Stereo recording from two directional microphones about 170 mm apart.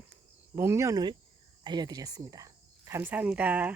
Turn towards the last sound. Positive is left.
turn(degrees=-10)  # may be behind; listen again after turning